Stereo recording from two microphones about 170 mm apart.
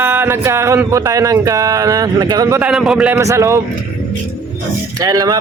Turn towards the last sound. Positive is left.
turn(degrees=-20)  # may be behind; listen again after turning